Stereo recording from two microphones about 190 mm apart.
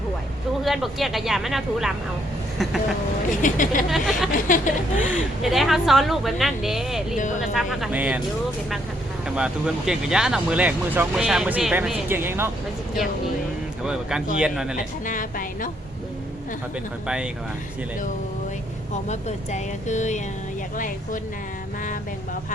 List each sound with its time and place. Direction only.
0.6 s speech: centre (ahead or behind)
3.4 s a woman's voice: 45° left (ahead or behind)
3.8 s speech: centre (ahead or behind)
4.3 s a woman's voice: 45° left (ahead or behind)
4.9 s speech: 10° right (ahead or behind)
9.3 s speech: 5° right (ahead or behind)
13.8 s speech: 5° right (ahead or behind)
14.8 s a woman's voice: 45° left (ahead or behind)
19.0 s a woman's voice: 40° left (ahead or behind)